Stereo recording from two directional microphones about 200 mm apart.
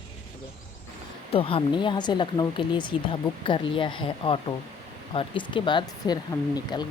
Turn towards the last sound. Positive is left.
turn(degrees=20)  # may be behind; listen again after turning